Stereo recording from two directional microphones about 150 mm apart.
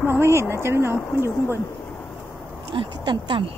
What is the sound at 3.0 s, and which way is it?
Speech, 30° right (ahead or behind).